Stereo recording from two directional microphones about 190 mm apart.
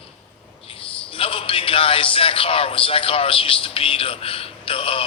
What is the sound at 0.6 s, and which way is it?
A man's voice, 30° left (ahead or behind).